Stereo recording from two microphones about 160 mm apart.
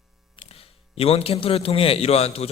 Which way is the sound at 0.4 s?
40° left (ahead or behind).